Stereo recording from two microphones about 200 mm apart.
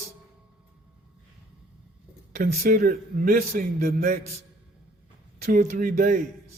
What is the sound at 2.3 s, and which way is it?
A man's voice, 45° right (ahead or behind).